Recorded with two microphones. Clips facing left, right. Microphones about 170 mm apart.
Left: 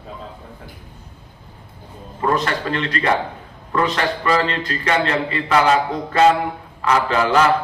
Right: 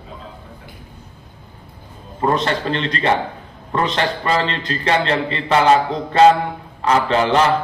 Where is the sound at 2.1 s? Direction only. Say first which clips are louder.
Right 2 dB; 30° right (ahead or behind).